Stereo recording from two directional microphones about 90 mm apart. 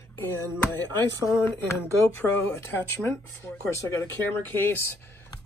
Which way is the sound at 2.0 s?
25° left (ahead or behind).